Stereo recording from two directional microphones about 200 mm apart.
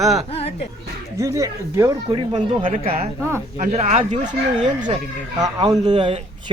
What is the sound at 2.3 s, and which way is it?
Speech, 30° right (ahead or behind).